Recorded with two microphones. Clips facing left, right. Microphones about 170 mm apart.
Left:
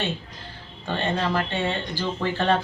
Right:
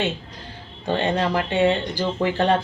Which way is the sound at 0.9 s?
15° right (ahead or behind).